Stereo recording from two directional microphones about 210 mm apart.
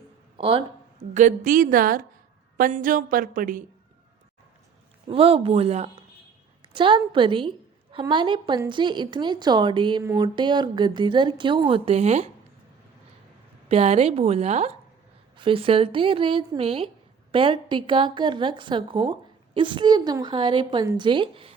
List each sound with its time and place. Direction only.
0.3 s speech: 25° right (ahead or behind)
1.1 s a woman's voice: 40° right (ahead or behind)
5.0 s a woman's voice: 25° right (ahead or behind)
13.7 s speech: 30° right (ahead or behind)